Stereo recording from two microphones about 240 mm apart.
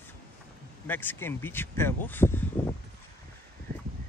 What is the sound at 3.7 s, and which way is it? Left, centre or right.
Crow, right.